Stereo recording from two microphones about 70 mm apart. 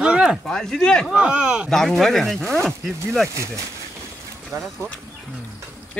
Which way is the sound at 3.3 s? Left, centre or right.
Right.